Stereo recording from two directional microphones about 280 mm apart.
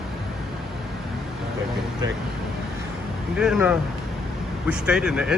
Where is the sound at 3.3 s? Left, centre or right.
Centre.